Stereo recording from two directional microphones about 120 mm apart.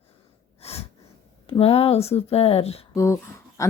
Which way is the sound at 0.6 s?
60° left (ahead or behind).